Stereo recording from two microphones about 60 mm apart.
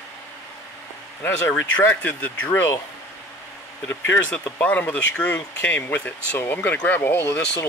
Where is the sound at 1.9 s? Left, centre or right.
Left.